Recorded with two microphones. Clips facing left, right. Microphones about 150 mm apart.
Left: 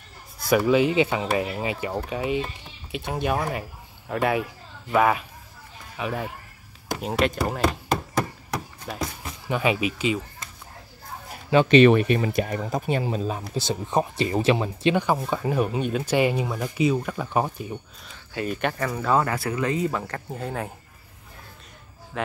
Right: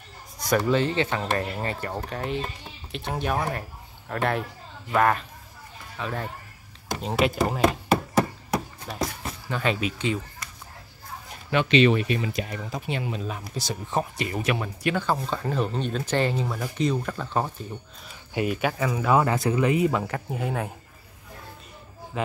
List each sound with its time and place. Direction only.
0.5 s speech: 10° left (ahead or behind)
7.0 s speech: centre (ahead or behind)
9.2 s speech: 10° left (ahead or behind)
11.7 s speech: 50° left (ahead or behind); by 13.4 s 35° left (ahead or behind)
13.6 s speech: 20° left (ahead or behind)
18.3 s speech: 10° right (ahead or behind)
19.2 s speech: 20° right (ahead or behind); by 20.7 s 5° right (ahead or behind)
22.2 s speech: 5° right (ahead or behind)